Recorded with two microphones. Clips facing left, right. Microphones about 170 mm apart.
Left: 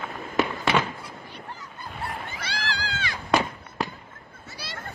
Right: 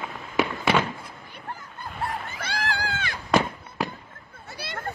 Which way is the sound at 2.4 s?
50° right (ahead or behind).